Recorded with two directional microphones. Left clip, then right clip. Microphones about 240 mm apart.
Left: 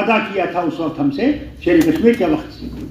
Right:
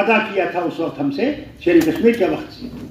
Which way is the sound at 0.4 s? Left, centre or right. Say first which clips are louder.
Left 1 dB; right.